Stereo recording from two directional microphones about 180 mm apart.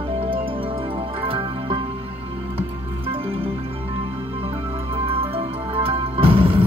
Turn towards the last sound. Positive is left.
turn(degrees=-30)  # may be behind; listen again after turning